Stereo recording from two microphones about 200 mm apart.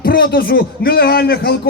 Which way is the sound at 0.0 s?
50° left (ahead or behind).